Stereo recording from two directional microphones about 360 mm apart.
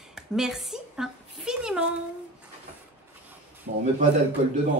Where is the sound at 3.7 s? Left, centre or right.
Right.